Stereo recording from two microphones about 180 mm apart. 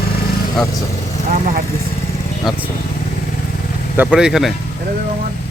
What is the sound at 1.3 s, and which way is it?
Speech, 45° right (ahead or behind).